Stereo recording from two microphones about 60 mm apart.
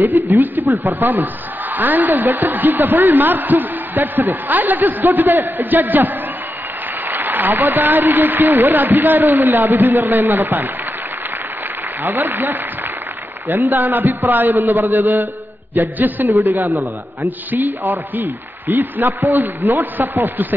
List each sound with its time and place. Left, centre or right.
0.2 s a man's voice: right
12.0 s a man's voice: right
16.3 s a man's voice: right